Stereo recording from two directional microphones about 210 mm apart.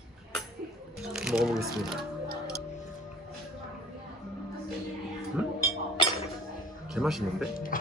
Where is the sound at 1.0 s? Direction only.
Centre (ahead or behind).